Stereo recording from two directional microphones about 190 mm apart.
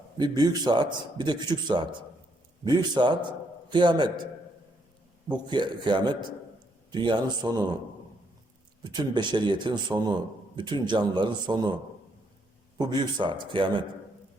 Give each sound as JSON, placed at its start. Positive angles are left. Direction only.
{"t": 0.2, "sound": "a man's voice", "side_deg": -20}
{"t": 5.3, "sound": "a man's voice", "side_deg": -25}
{"t": 8.8, "sound": "a man's voice", "side_deg": -25}